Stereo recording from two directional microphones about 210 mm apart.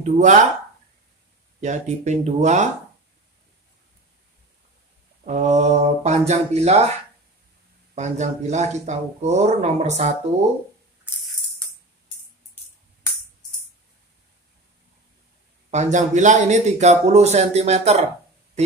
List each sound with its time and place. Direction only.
0.0 s speech: 35° right (ahead or behind)
1.6 s speech: 35° right (ahead or behind)
5.2 s speech: 35° right (ahead or behind)
7.9 s speech: 35° right (ahead or behind)
15.7 s speech: 35° right (ahead or behind)